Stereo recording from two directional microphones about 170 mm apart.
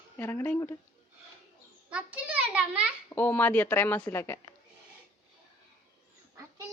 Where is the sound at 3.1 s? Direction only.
10° left (ahead or behind).